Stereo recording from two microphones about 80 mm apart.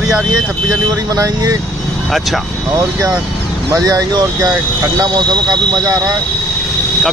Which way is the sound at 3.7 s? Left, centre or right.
Right.